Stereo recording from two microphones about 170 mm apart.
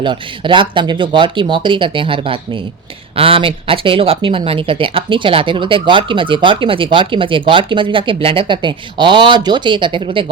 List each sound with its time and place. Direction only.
0.0 s speech: 30° right (ahead or behind)